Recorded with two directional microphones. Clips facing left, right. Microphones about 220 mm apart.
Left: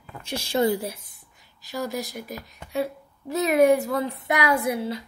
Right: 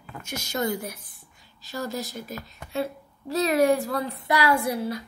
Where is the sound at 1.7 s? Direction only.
15° left (ahead or behind).